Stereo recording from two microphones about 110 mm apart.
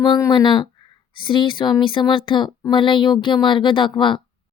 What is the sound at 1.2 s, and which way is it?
Speech, 50° left (ahead or behind).